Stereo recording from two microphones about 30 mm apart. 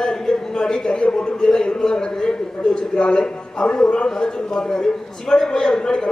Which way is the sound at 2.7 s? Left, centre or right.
Left.